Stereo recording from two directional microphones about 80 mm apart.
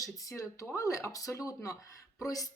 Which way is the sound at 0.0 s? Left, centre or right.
Left.